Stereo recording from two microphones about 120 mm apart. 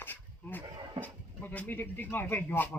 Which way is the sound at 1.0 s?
10° left (ahead or behind).